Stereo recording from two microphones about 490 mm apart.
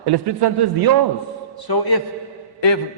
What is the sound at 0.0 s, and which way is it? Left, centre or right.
Speech, right.